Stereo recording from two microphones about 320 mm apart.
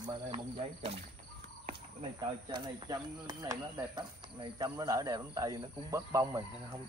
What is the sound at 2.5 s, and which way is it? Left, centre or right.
Speech, centre.